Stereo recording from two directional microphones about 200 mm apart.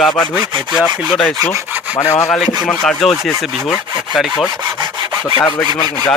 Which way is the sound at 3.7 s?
5° right (ahead or behind).